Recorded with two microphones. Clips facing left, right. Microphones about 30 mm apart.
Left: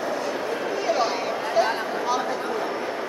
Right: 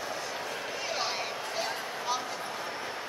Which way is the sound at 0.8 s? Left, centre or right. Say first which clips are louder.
Left 10 dB; centre.